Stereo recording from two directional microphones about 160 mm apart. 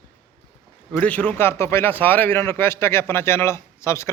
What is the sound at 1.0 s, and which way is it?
A man's voice, 10° left (ahead or behind).